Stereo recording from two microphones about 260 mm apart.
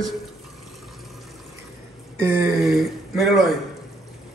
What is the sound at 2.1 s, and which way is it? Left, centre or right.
Speech, centre.